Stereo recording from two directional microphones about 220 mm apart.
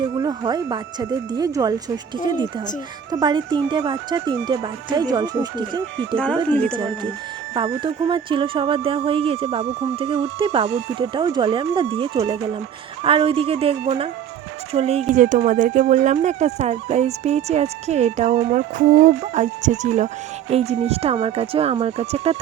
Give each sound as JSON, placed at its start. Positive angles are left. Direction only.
{"t": 0.0, "sound": "speech", "side_deg": -20}
{"t": 3.1, "sound": "speech", "side_deg": -15}
{"t": 6.5, "sound": "speech", "side_deg": 5}
{"t": 7.5, "sound": "speech", "side_deg": -20}